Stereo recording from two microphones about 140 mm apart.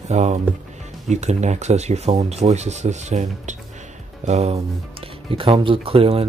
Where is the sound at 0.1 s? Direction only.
55° right (ahead or behind).